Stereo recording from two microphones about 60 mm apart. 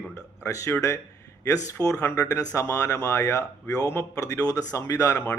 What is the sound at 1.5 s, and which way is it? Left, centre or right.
Speech, left.